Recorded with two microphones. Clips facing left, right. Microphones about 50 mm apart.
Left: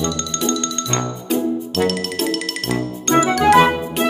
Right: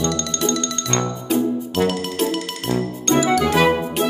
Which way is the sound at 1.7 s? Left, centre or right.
Centre.